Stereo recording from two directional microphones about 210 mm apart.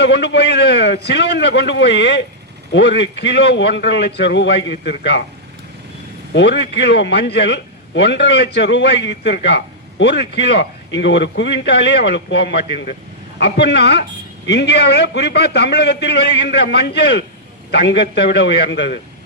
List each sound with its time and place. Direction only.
0.0 s a man's voice: 55° left (ahead or behind)
6.3 s a man's voice: 55° left (ahead or behind)